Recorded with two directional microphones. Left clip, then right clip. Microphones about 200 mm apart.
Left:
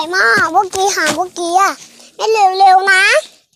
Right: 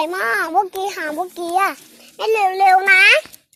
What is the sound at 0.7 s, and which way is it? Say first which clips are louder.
A child's voice: left 9 dB; 15° left (ahead or behind).